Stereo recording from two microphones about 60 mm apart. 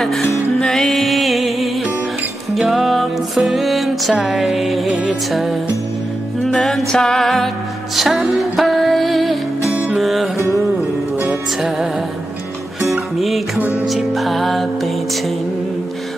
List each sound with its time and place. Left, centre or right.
0.6 s music: centre
4.8 s music: centre
5.3 s music: centre
6.5 s music: centre
13.6 s music: right
13.8 s music: centre